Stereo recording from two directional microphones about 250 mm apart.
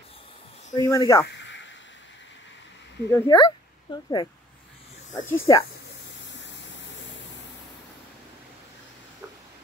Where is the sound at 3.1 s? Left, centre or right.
Centre.